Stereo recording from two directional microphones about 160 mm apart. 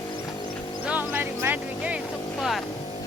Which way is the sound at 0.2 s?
25° left (ahead or behind).